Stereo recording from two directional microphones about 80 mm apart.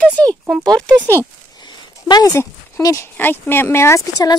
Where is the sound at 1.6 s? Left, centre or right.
Left.